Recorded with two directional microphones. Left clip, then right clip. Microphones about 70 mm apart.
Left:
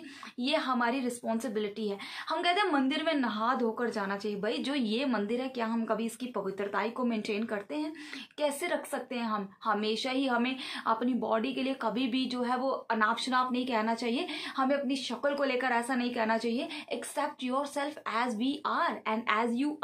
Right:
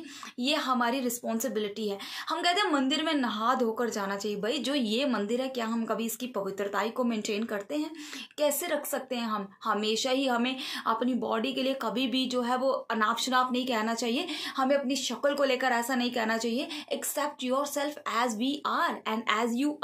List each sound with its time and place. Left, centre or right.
0.4 s a woman's voice: left